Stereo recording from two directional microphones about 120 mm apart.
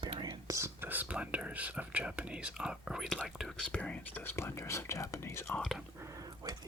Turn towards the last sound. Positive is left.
turn(degrees=-30)  # may be behind; listen again after turning